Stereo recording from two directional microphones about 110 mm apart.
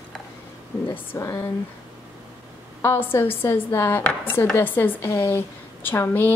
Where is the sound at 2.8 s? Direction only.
20° left (ahead or behind).